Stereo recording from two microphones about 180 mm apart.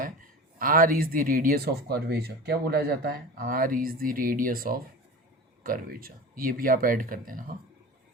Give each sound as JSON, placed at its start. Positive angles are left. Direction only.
{"t": 0.6, "sound": "speech", "side_deg": -50}